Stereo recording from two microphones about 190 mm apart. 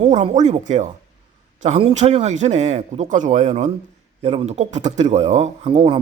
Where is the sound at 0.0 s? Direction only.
30° right (ahead or behind).